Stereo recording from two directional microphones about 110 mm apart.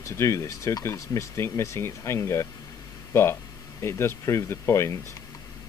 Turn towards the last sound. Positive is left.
turn(degrees=25)  # may be behind; listen again after turning